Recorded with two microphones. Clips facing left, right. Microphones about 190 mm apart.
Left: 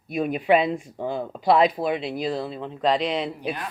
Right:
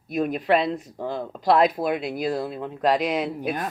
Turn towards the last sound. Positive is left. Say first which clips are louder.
# right 2 dB
turn(degrees=-45)  # may be behind; listen again after turning